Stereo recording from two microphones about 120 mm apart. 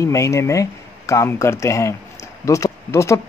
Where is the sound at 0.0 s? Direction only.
25° left (ahead or behind).